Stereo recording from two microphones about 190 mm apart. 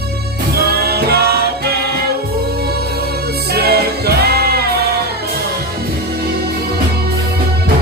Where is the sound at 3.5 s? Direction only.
55° right (ahead or behind).